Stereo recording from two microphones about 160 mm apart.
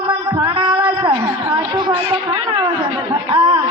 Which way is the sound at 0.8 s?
20° right (ahead or behind).